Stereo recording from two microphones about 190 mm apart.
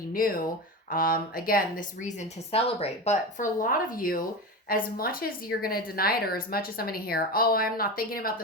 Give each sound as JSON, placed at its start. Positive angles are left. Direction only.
{"t": 0.1, "sound": "a woman's voice", "side_deg": 50}